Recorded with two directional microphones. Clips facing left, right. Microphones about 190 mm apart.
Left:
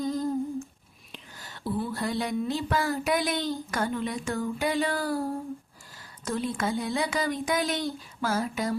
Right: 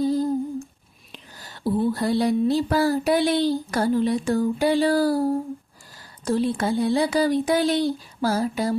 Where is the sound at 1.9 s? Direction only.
35° right (ahead or behind).